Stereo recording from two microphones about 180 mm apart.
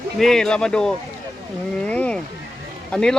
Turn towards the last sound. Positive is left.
turn(degrees=5)  # may be behind; listen again after turning